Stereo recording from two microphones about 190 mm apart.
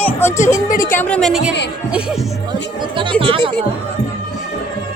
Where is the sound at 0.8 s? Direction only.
10° left (ahead or behind).